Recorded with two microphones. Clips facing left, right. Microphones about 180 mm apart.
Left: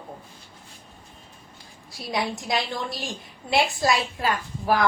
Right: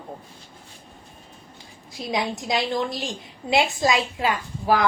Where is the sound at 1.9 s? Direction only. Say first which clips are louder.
Right 2 dB; 20° right (ahead or behind).